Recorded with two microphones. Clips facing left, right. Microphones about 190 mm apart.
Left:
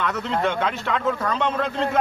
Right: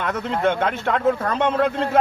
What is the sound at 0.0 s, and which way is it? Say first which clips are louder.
A man's voice: right 2 dB; 50° right (ahead or behind).